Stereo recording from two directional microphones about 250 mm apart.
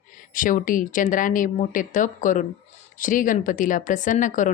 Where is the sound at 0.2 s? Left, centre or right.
Left.